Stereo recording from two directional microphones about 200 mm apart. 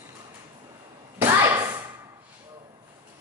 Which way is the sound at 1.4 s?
15° right (ahead or behind).